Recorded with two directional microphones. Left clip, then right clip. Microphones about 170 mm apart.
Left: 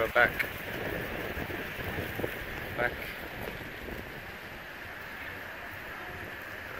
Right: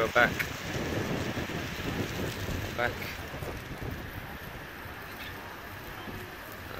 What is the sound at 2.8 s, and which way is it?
Speech, 15° right (ahead or behind).